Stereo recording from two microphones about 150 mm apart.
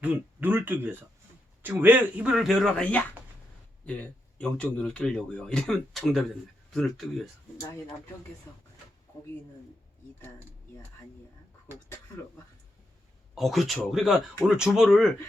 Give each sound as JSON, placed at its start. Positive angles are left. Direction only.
{"t": 0.0, "sound": "speech", "side_deg": -10}
{"t": 4.4, "sound": "speech", "side_deg": 5}
{"t": 8.5, "sound": "speech", "side_deg": 25}
{"t": 13.3, "sound": "speech", "side_deg": 0}